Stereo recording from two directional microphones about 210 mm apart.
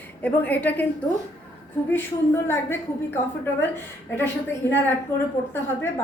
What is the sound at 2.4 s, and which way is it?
Speech, 10° left (ahead or behind).